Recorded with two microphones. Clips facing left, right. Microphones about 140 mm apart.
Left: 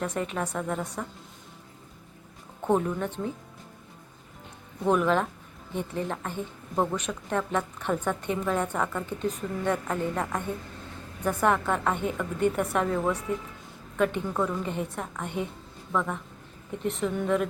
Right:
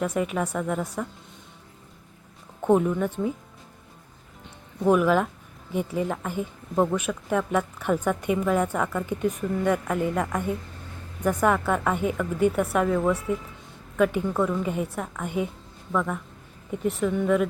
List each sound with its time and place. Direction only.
0.0 s a woman's voice: 10° right (ahead or behind)
2.6 s a woman's voice: 5° right (ahead or behind)
4.8 s a woman's voice: 5° right (ahead or behind)
11.4 s a woman's voice: 5° right (ahead or behind)